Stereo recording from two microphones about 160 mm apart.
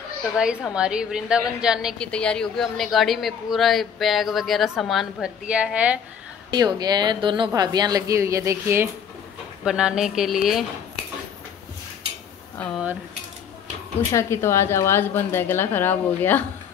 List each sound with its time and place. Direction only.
0.7 s a man's voice: 5° right (ahead or behind)
6.5 s speech: 25° right (ahead or behind)
9.7 s a man's voice: 5° right (ahead or behind)
12.5 s speech: 5° left (ahead or behind)
14.1 s a woman's voice: 15° left (ahead or behind)